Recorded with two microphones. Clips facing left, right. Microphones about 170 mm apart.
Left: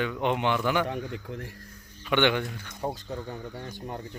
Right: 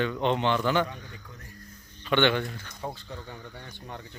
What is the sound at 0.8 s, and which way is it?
Speech, 75° left (ahead or behind).